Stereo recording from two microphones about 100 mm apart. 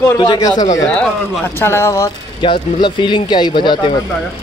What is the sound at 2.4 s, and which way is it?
Speech, 55° left (ahead or behind).